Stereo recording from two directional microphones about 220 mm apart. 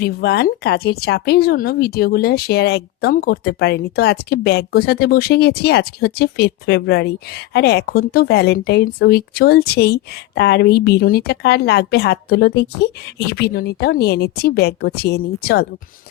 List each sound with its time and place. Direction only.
0.0 s speech: 45° left (ahead or behind)